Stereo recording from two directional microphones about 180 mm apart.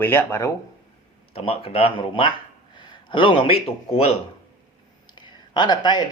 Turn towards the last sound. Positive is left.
turn(degrees=25)  # may be behind; listen again after turning